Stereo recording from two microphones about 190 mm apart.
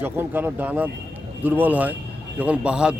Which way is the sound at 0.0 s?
10° right (ahead or behind).